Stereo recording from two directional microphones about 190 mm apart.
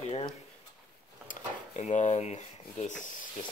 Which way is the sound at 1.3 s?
40° left (ahead or behind).